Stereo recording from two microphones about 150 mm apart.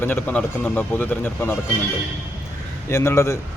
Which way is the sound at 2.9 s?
20° left (ahead or behind).